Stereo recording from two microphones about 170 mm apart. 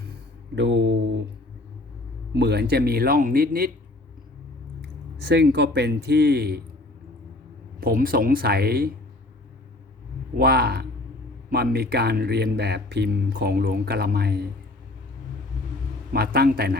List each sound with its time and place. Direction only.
0.5 s mantra: 90° right
2.3 s speech: 75° right (ahead or behind)
5.3 s speech: 85° right
7.8 s speech: 60° right (ahead or behind)
10.3 s speech: 65° right (ahead or behind)
16.1 s speech: 65° right (ahead or behind)